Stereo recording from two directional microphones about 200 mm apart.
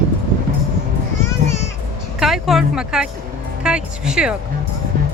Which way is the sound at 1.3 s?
15° left (ahead or behind).